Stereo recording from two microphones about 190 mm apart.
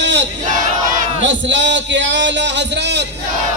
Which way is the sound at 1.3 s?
70° right (ahead or behind).